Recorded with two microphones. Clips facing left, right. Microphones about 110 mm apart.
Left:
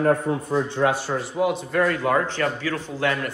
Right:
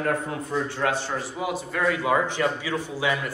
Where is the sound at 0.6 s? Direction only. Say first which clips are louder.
Left 3 dB; 20° left (ahead or behind).